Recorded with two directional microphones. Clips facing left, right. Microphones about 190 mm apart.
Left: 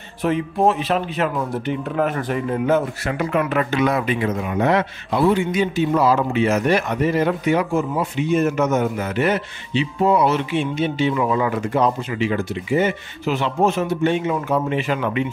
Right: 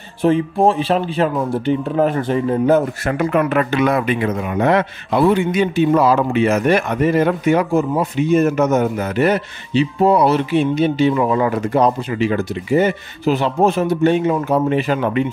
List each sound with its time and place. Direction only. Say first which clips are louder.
0.2 s speech: right 4 dB; 30° right (ahead or behind)
3.0 s speech: right 4 dB; 50° right (ahead or behind)